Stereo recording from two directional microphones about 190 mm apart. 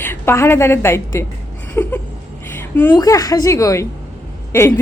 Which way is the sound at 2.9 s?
20° left (ahead or behind).